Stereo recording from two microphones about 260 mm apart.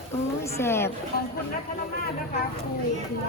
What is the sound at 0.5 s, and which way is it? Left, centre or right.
Speech, centre.